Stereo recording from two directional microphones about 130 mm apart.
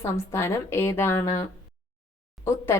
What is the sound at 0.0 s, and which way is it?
Speech, 20° left (ahead or behind).